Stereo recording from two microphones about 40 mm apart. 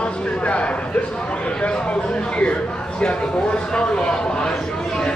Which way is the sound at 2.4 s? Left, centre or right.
Left.